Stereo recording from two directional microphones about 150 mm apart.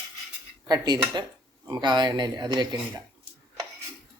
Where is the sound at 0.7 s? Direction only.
25° right (ahead or behind).